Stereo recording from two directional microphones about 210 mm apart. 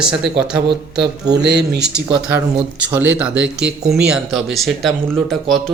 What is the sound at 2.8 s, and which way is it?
Speech, 5° right (ahead or behind).